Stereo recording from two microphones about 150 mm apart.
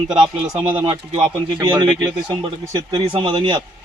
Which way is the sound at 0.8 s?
35° right (ahead or behind).